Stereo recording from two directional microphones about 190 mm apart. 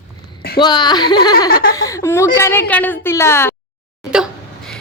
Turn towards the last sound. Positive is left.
turn(degrees=-5)  # may be behind; listen again after turning